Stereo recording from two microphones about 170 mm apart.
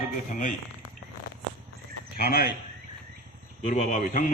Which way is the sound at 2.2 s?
65° left (ahead or behind).